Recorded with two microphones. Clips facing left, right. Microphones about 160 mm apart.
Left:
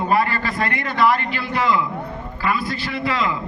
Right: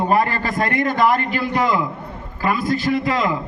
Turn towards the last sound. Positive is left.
turn(degrees=-45)  # may be behind; listen again after turning